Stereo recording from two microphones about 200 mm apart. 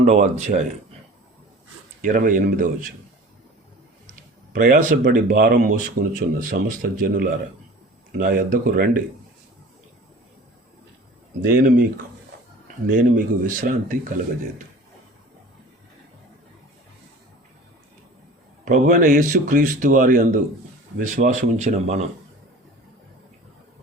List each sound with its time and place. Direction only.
0.0 s speech: 35° right (ahead or behind)
2.0 s speech: 40° right (ahead or behind)
4.6 s speech: 45° right (ahead or behind)
11.4 s speech: 50° right (ahead or behind)
18.6 s speech: 40° right (ahead or behind)